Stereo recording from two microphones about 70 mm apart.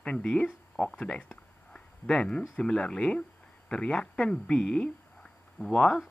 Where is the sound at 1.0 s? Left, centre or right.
Centre.